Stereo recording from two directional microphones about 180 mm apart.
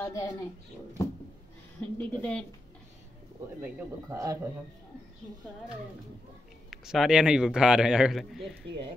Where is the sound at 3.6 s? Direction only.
15° right (ahead or behind).